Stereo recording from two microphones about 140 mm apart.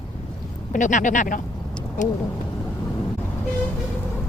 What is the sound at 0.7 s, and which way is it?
Speech, 65° left (ahead or behind).